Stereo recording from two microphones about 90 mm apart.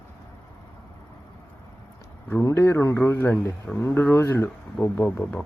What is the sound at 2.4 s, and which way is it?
A man's voice, 35° left (ahead or behind).